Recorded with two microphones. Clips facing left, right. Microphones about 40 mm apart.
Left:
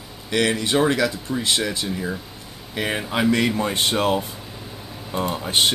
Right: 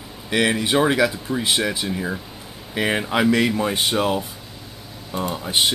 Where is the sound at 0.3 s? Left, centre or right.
Centre.